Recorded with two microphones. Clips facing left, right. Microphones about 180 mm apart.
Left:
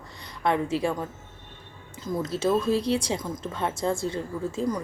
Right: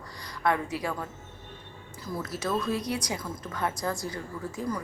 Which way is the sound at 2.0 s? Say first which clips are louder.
Left 7 dB; 25° left (ahead or behind).